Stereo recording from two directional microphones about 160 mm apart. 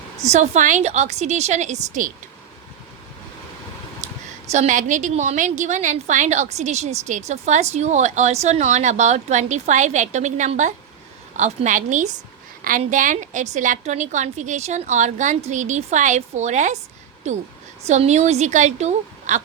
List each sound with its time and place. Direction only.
0.2 s a woman's voice: 45° right (ahead or behind)
4.5 s a woman's voice: 50° right (ahead or behind)